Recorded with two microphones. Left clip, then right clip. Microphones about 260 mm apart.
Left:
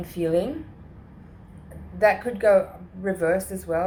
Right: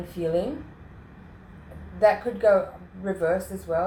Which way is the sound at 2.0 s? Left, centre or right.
Left.